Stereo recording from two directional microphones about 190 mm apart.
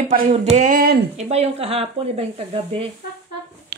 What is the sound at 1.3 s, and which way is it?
Speech, 30° right (ahead or behind).